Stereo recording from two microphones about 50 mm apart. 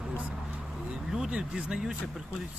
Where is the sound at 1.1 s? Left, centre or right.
Centre.